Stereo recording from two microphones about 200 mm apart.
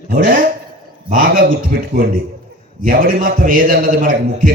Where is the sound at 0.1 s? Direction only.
45° right (ahead or behind).